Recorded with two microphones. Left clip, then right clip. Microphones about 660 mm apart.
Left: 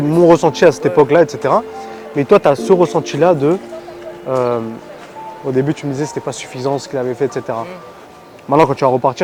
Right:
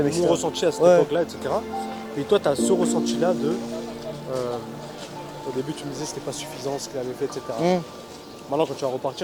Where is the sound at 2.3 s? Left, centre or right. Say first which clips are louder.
Left 10 dB; left.